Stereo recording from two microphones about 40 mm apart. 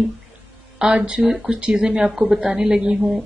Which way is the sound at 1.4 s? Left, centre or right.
Right.